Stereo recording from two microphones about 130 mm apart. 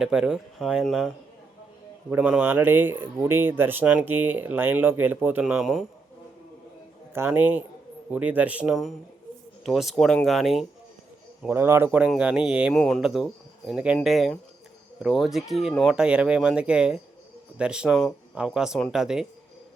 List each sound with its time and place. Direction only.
0.0 s speech: 5° right (ahead or behind)
2.0 s speech: 10° right (ahead or behind)
7.1 s speech: 15° right (ahead or behind); by 10.7 s centre (ahead or behind)
11.5 s speech: 20° right (ahead or behind)
12.7 s speech: 5° left (ahead or behind)